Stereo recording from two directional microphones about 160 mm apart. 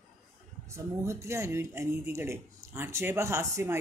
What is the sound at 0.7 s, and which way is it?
Speech, 15° right (ahead or behind).